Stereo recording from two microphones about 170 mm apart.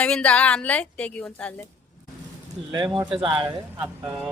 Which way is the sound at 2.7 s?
25° right (ahead or behind).